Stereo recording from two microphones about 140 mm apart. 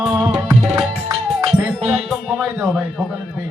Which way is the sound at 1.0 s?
25° right (ahead or behind).